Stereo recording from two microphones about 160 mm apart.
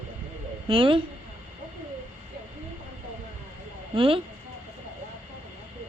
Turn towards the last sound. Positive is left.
turn(degrees=-35)  # may be behind; listen again after turning